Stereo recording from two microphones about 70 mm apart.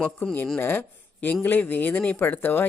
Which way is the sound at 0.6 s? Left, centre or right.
Left.